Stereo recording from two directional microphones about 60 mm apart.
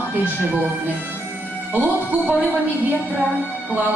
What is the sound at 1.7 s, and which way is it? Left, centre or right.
Music, right.